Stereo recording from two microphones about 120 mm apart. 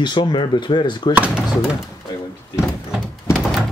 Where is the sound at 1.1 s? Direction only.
10° right (ahead or behind).